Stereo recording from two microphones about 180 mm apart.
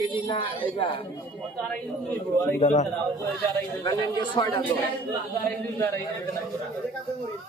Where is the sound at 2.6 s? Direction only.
40° left (ahead or behind).